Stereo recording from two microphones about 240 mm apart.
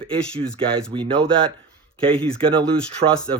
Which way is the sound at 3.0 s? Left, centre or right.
Right.